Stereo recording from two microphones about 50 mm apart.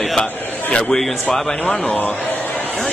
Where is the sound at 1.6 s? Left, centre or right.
Left.